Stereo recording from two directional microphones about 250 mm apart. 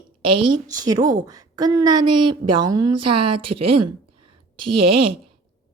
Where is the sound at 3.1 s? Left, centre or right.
Right.